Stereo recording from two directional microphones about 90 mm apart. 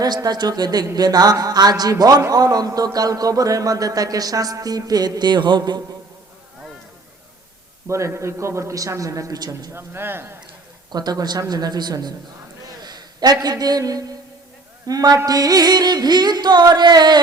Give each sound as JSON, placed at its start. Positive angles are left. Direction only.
{"t": 0.0, "sound": "a man's voice", "side_deg": -50}
{"t": 7.9, "sound": "a man's voice", "side_deg": -35}
{"t": 9.7, "sound": "speech", "side_deg": -25}
{"t": 10.9, "sound": "a man's voice", "side_deg": -45}